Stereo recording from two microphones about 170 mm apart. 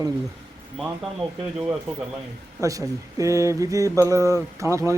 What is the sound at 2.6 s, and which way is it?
Speech, 20° right (ahead or behind).